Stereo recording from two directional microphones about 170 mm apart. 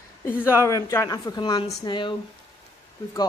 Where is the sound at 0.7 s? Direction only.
20° left (ahead or behind).